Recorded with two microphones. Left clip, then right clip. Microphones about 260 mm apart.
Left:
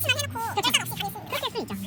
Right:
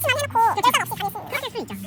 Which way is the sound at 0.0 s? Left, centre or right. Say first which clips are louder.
Right 8 dB; centre.